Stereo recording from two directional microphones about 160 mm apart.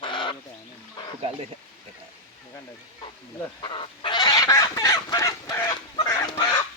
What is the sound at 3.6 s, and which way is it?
Fowl, 30° left (ahead or behind).